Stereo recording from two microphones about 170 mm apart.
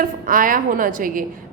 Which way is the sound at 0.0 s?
55° right (ahead or behind).